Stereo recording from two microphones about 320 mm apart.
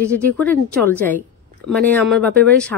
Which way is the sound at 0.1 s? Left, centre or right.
Centre.